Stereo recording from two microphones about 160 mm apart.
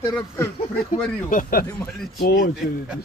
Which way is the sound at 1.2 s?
60° left (ahead or behind).